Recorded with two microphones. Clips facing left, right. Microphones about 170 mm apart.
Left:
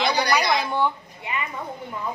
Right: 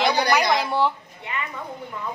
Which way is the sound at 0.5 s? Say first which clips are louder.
Right 1 dB; 5° right (ahead or behind).